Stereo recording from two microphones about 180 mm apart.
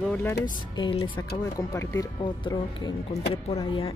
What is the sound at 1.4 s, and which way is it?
Speech, 15° left (ahead or behind).